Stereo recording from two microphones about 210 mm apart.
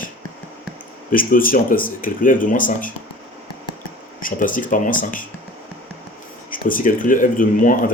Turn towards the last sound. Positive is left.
turn(degrees=40)  # may be behind; listen again after turning